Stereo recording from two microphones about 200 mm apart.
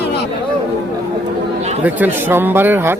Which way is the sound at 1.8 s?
10° right (ahead or behind).